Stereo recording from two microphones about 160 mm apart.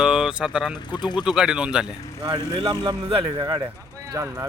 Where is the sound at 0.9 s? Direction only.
25° left (ahead or behind).